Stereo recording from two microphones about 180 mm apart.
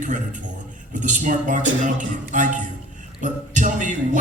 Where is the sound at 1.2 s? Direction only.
45° right (ahead or behind).